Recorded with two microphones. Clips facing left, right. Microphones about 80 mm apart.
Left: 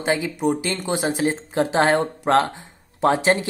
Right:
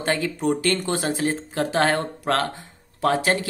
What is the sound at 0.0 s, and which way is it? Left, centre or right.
Speech, centre.